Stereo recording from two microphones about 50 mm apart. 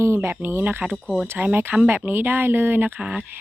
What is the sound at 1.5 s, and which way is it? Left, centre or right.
Speech, right.